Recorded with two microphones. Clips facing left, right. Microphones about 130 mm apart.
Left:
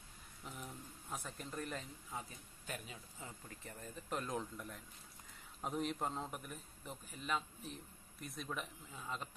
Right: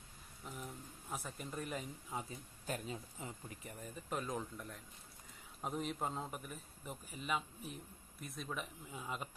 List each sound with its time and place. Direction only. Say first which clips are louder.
0.5 s a sound: right 2 dB; centre (ahead or behind)
2.6 s speech: right 6 dB; 35° right (ahead or behind)
3.2 s speech: right 3 dB; 20° right (ahead or behind)
4.1 s a man's voice: even; centre (ahead or behind)